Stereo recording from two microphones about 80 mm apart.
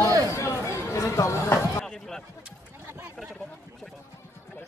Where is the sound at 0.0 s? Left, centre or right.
Right.